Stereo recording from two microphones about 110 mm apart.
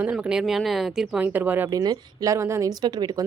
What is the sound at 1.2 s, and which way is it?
Speech, 15° right (ahead or behind).